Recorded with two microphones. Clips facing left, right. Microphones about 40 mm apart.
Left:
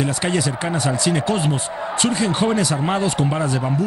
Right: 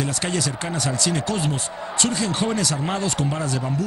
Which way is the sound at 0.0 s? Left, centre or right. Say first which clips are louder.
Left 4 dB; centre.